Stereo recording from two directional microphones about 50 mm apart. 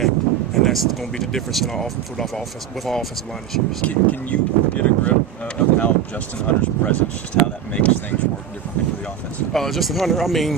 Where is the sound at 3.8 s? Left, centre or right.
Left.